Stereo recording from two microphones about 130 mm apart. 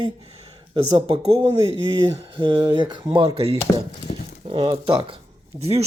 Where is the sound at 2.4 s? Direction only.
35° right (ahead or behind).